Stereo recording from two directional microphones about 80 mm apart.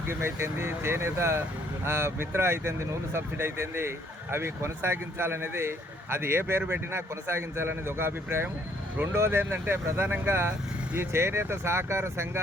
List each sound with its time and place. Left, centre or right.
0.1 s speech: right